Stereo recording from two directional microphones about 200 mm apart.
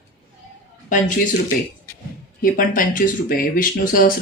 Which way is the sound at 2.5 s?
45° left (ahead or behind).